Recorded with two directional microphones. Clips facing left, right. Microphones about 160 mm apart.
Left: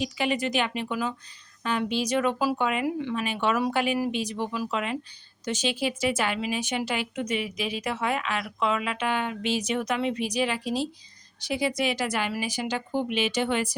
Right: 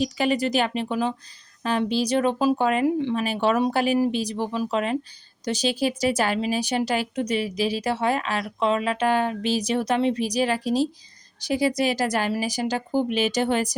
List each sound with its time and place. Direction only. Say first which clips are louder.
0.0 s a woman's voice: right 4 dB; 40° right (ahead or behind)